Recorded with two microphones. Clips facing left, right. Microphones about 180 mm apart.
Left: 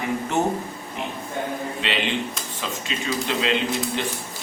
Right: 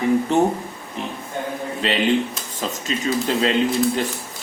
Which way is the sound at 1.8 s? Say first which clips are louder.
Right 8 dB; 40° right (ahead or behind).